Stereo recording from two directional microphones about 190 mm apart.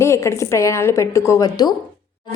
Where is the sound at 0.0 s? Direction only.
15° left (ahead or behind).